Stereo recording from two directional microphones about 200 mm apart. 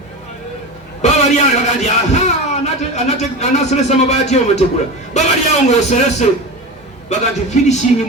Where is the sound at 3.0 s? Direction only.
35° left (ahead or behind).